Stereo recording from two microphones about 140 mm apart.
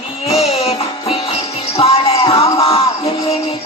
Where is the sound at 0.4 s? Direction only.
45° left (ahead or behind).